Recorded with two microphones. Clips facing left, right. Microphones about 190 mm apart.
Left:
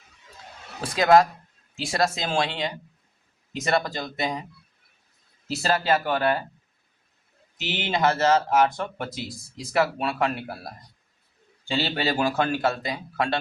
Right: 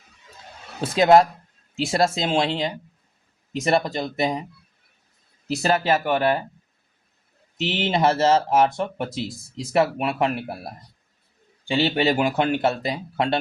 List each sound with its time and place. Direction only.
0.8 s speech: 25° right (ahead or behind)
5.5 s speech: 20° right (ahead or behind)
7.6 s speech: 25° right (ahead or behind)